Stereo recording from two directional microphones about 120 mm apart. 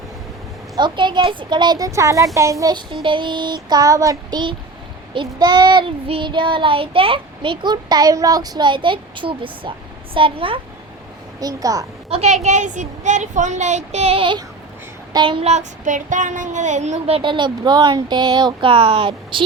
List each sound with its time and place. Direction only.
0.8 s speech: 40° right (ahead or behind)
2.7 s a woman's voice: 45° right (ahead or behind)
11.3 s a child's voice: 30° right (ahead or behind)
12.0 s a woman's voice: 60° right (ahead or behind)
15.1 s speech: 40° right (ahead or behind)
15.4 s a woman's voice: 80° right; by 19.5 s 45° right (ahead or behind)